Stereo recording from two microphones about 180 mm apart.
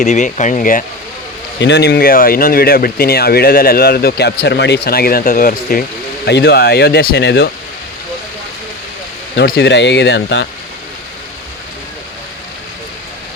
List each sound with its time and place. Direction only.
0.0 s speech: 45° left (ahead or behind)
1.5 s speech: 75° left (ahead or behind); by 5.8 s 55° left (ahead or behind)
6.2 s speech: 70° left (ahead or behind)
9.3 s speech: 75° left (ahead or behind)